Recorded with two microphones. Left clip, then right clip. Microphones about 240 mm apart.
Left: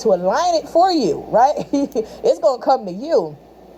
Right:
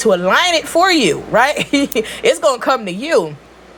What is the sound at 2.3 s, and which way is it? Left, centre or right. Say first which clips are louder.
Speech: even; right.